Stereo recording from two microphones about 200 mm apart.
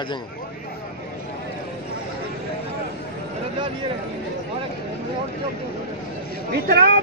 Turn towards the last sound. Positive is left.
turn(degrees=-55)  # may be behind; listen again after turning